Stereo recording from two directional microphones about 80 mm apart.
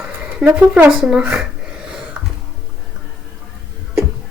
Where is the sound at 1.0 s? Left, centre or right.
Centre.